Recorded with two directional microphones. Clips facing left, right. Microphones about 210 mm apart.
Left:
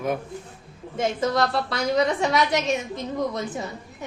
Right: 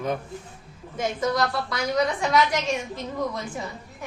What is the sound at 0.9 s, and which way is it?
A woman's voice, 25° left (ahead or behind).